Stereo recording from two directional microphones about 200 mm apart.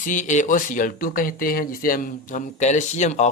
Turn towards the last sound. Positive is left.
turn(degrees=35)  # may be behind; listen again after turning